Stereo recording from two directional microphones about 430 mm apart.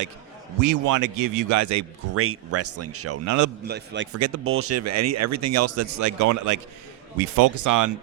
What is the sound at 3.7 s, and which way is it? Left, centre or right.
Speech, right.